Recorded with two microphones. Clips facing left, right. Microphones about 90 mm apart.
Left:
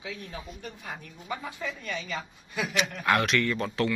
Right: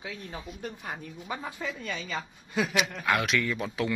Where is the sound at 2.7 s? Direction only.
Centre (ahead or behind).